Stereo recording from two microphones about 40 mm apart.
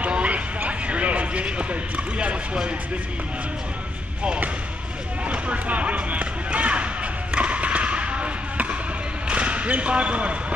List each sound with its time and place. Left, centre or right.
0.0 s vehicle: right
0.7 s basketball bounce: right
5.3 s a sound: right
9.3 s basketball bounce: right
9.7 s speech: right